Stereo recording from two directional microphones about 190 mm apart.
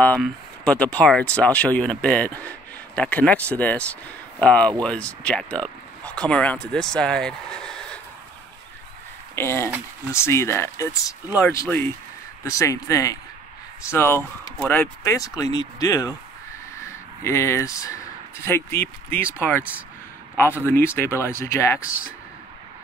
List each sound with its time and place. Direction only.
0.0 s speech: 5° left (ahead or behind)
9.3 s speech: 15° left (ahead or behind)
20.6 s speech: 10° left (ahead or behind)